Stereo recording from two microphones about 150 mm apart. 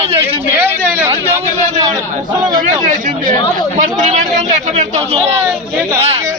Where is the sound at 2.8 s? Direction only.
55° right (ahead or behind); by 6.2 s 40° right (ahead or behind).